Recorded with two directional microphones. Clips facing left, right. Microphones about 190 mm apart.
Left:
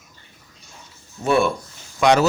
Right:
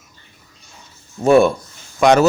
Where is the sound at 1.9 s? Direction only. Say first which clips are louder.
Right 4 dB; 50° right (ahead or behind).